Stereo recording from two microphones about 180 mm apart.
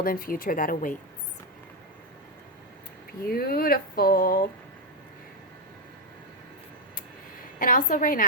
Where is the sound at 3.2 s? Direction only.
55° left (ahead or behind).